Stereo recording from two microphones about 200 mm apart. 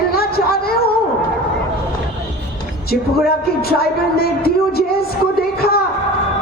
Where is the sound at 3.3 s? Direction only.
50° left (ahead or behind).